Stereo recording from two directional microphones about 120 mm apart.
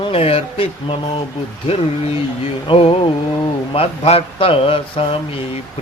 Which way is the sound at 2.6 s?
50° left (ahead or behind).